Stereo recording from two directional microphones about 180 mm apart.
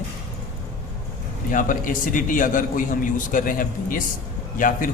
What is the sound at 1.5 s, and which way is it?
A man's voice, 50° left (ahead or behind).